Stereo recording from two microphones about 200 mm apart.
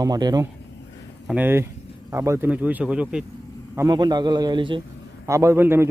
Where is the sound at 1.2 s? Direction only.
10° right (ahead or behind).